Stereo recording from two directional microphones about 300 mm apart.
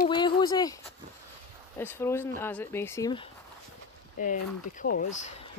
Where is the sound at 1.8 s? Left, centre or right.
Centre.